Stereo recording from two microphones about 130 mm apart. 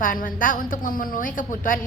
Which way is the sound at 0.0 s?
90° left.